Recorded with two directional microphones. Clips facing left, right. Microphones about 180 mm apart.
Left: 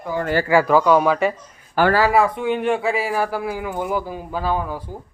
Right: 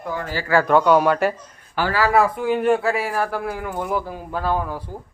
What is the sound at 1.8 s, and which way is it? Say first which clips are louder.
Speech: left 6 dB; 45° left (ahead or behind).